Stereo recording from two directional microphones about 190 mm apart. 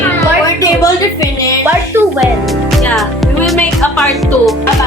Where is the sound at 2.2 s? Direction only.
Centre (ahead or behind).